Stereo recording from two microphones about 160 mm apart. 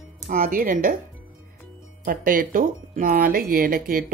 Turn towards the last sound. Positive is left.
turn(degrees=-60)  # may be behind; listen again after turning